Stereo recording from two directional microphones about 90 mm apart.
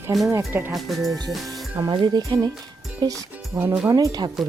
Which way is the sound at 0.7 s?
Centre (ahead or behind).